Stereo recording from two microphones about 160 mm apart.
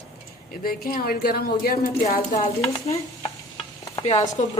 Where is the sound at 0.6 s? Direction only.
65° left (ahead or behind).